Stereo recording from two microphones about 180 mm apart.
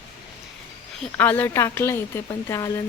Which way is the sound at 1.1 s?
10° left (ahead or behind).